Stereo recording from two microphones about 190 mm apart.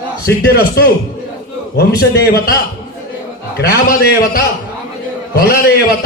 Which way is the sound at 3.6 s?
55° left (ahead or behind).